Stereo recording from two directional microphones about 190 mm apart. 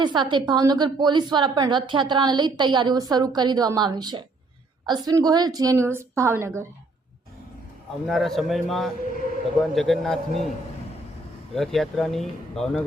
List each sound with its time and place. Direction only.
0.0 s a woman's voice: 25° right (ahead or behind)
8.0 s speech: centre (ahead or behind)
11.5 s speech: centre (ahead or behind)